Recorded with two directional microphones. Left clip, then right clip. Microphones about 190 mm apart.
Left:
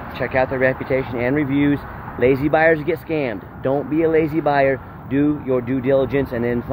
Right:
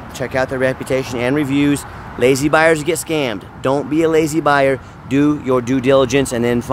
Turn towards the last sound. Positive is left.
turn(degrees=-40)  # may be behind; listen again after turning